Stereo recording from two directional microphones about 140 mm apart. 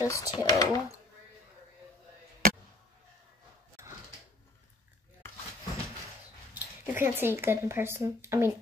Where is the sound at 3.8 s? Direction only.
20° right (ahead or behind).